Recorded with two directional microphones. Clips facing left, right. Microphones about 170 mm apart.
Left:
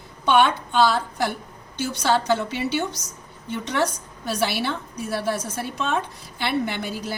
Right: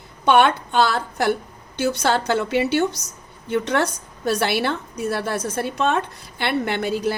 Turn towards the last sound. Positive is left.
turn(degrees=-60)  # may be behind; listen again after turning